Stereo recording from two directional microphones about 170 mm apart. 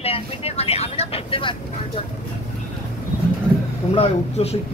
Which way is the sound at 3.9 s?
35° left (ahead or behind).